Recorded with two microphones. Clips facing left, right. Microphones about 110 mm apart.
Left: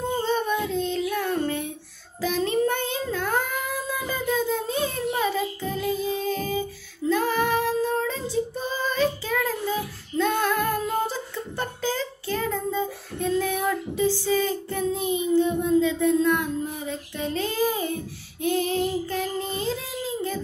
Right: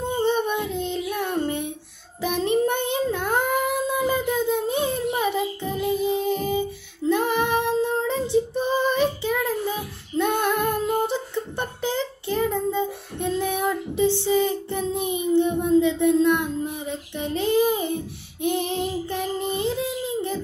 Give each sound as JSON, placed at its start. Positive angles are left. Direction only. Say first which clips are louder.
{"t": 0.0, "sound": "child singing", "louder": "right 2 dB", "side_deg": -20}